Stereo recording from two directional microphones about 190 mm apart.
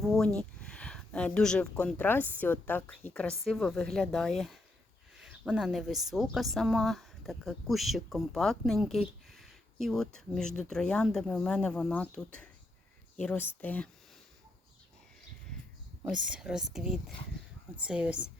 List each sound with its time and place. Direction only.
0.0 s speech: centre (ahead or behind)
16.0 s speech: 5° right (ahead or behind)